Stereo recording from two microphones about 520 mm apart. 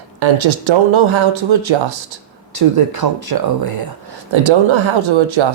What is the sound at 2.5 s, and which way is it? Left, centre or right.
Speech, right.